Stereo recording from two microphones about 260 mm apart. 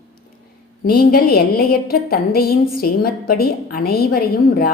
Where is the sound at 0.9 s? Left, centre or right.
Left.